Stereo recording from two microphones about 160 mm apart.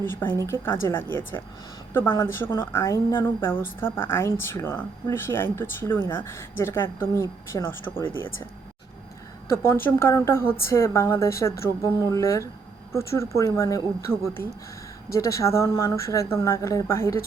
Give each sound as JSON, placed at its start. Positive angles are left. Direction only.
{"t": 0.0, "sound": "a woman's voice", "side_deg": 15}
{"t": 9.8, "sound": "a woman's voice", "side_deg": 15}